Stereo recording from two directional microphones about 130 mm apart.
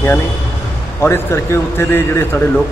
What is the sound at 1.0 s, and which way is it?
A man's voice, 20° left (ahead or behind).